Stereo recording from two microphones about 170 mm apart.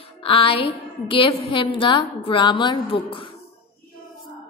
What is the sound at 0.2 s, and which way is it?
A woman's voice, 30° left (ahead or behind).